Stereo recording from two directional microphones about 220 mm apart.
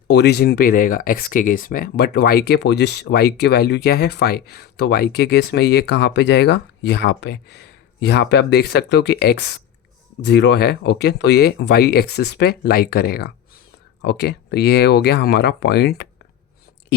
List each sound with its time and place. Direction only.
0.1 s speech: 50° left (ahead or behind)